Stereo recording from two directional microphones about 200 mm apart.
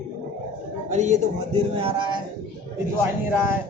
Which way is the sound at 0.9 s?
35° right (ahead or behind).